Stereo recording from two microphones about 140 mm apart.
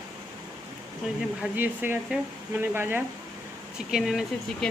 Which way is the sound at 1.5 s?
15° right (ahead or behind).